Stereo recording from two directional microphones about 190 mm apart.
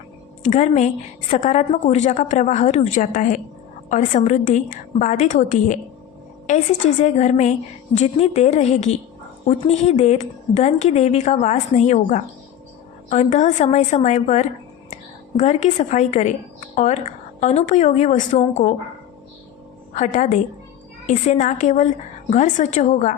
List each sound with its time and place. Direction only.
0.4 s a woman's voice: 40° left (ahead or behind)
7.0 s a woman's voice: 35° left (ahead or behind)
19.9 s a woman's voice: 40° left (ahead or behind)